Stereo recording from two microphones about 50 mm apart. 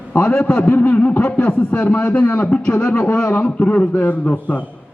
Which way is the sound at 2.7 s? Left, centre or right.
Left.